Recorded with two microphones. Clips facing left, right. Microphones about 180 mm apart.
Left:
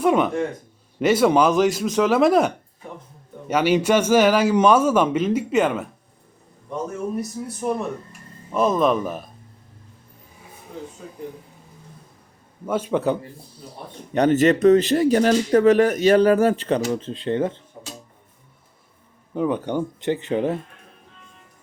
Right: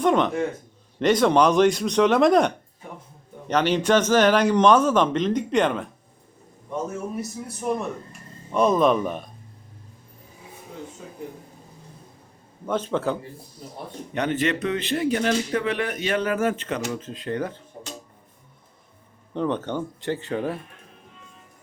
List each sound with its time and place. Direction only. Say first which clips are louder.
0.0 s a man's voice: left 1 dB; 5° left (ahead or behind)
7.2 s a man's voice: left 4 dB; centre (ahead or behind)
12.6 s a man's voice: left 3 dB; 10° left (ahead or behind)
14.1 s speech: left 8 dB; 40° left (ahead or behind); by 17.6 s 25° left (ahead or behind)
19.3 s a man's voice: left 3 dB; 10° left (ahead or behind)